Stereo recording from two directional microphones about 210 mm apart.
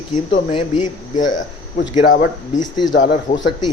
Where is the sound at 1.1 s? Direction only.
40° left (ahead or behind).